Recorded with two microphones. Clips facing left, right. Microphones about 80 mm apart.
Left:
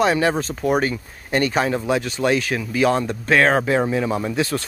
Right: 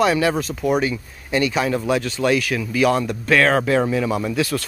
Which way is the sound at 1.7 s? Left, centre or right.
Left.